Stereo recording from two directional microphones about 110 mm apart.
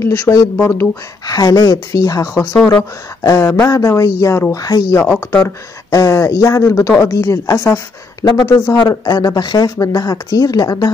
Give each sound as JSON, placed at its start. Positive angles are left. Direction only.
{"t": 0.0, "sound": "speech", "side_deg": 25}
{"t": 1.2, "sound": "speech", "side_deg": 35}
{"t": 4.9, "sound": "speech", "side_deg": 15}
{"t": 5.9, "sound": "speech", "side_deg": 30}
{"t": 8.7, "sound": "speech", "side_deg": 35}